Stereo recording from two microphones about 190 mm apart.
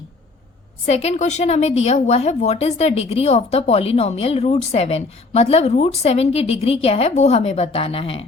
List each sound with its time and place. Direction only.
0.9 s a woman's voice: 35° left (ahead or behind)